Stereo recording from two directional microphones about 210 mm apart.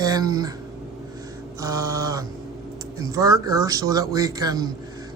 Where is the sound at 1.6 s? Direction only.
15° right (ahead or behind).